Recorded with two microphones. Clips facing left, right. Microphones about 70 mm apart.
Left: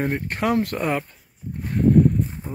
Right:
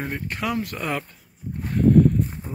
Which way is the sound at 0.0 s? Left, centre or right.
Left.